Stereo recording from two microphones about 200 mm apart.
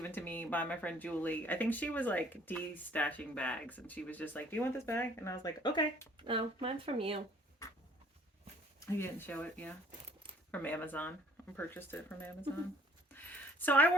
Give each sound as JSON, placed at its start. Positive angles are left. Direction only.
{"t": 0.0, "sound": "speech", "side_deg": 10}
{"t": 6.2, "sound": "speech", "side_deg": -25}
{"t": 8.9, "sound": "speech", "side_deg": 10}
{"t": 13.1, "sound": "a sound", "side_deg": 10}